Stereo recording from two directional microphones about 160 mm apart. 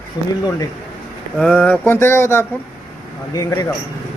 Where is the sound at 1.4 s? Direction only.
5° left (ahead or behind); by 3.7 s 25° left (ahead or behind).